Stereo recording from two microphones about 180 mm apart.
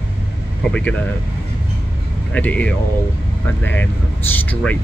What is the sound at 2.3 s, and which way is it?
Speech, 10° left (ahead or behind).